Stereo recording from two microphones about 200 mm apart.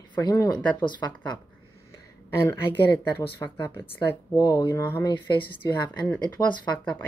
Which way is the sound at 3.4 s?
20° left (ahead or behind).